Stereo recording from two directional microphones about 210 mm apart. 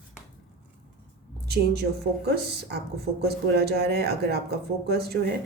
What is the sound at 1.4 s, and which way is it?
A woman's voice, 50° right (ahead or behind).